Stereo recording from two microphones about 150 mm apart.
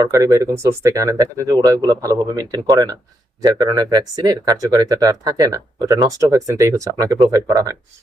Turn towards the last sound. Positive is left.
turn(degrees=-20)  # may be behind; listen again after turning